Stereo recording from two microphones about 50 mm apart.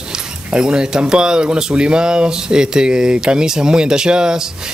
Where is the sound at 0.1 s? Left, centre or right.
Centre.